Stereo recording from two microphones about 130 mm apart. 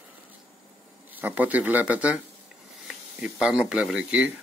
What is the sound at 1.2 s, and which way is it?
Speech, 10° right (ahead or behind).